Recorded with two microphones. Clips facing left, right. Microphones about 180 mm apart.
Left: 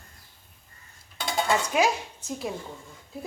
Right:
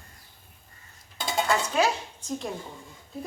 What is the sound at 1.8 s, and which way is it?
Speech, 10° left (ahead or behind).